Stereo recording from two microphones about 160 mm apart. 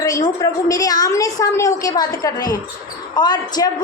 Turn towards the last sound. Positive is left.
turn(degrees=25)  # may be behind; listen again after turning